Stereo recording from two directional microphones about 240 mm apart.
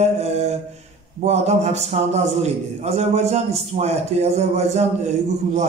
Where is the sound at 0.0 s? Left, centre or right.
Right.